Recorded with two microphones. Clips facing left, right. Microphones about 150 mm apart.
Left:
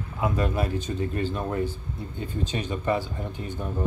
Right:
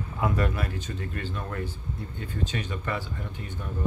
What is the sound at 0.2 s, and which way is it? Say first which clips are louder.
Speech: left 2 dB; 20° left (ahead or behind).